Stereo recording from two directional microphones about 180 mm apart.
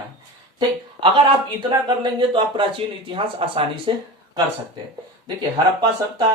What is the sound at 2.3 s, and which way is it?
Speech, 30° right (ahead or behind).